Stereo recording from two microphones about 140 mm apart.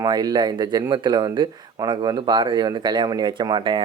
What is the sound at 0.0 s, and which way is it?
Speech, 30° right (ahead or behind).